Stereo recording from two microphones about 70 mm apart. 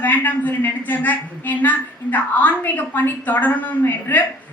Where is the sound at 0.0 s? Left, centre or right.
Left.